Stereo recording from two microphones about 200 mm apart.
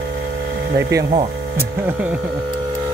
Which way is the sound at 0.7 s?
55° right (ahead or behind).